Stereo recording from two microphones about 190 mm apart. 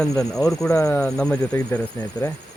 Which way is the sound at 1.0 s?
5° left (ahead or behind).